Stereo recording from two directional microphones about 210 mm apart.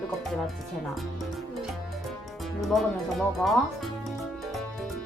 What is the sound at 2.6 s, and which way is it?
Speech, centre (ahead or behind).